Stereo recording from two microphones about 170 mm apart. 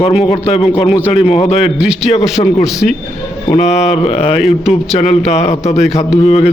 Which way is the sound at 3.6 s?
40° left (ahead or behind).